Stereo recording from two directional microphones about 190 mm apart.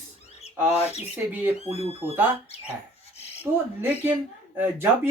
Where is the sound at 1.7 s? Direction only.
30° right (ahead or behind).